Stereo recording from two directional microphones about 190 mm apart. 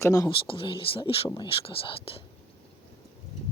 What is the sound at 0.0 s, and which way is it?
Speech, 20° left (ahead or behind).